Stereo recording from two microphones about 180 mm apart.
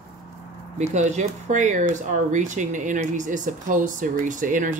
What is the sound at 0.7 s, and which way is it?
Speech, 40° right (ahead or behind).